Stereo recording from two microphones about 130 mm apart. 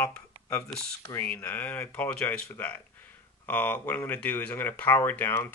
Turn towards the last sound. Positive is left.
turn(degrees=15)  # may be behind; listen again after turning